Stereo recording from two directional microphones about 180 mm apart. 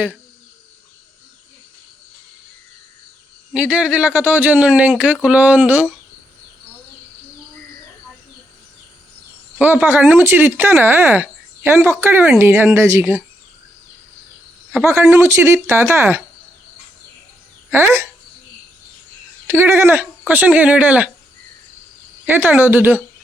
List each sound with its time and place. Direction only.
3.5 s speech: 5° right (ahead or behind)
9.6 s speech: 10° right (ahead or behind)
14.8 s speech: 15° right (ahead or behind)
17.7 s speech: 15° right (ahead or behind)
19.5 s speech: 15° right (ahead or behind)
22.4 s speech: 10° right (ahead or behind)